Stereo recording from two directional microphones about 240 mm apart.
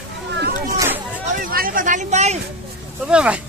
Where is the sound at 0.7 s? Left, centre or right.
Centre.